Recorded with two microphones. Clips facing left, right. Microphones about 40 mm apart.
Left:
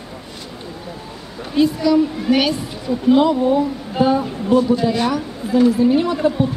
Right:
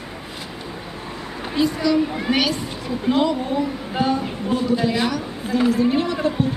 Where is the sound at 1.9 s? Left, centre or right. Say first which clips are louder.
Left 4 dB; centre.